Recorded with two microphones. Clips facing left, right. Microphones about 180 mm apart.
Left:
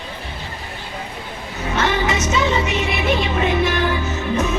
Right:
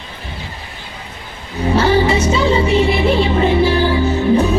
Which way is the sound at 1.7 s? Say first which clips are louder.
Right 7 dB; 30° right (ahead or behind).